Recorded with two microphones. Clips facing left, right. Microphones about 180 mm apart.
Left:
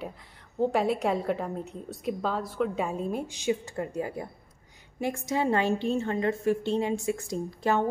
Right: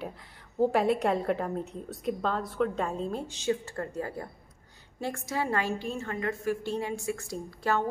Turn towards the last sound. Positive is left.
turn(degrees=20)  # may be behind; listen again after turning